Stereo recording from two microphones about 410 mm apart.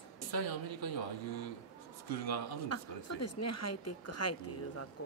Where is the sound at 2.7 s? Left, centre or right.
Left.